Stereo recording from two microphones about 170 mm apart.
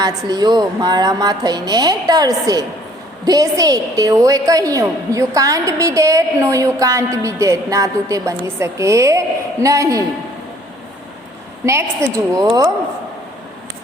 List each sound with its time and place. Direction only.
0.0 s a woman's voice: 25° right (ahead or behind)
11.6 s a woman's voice: 15° right (ahead or behind)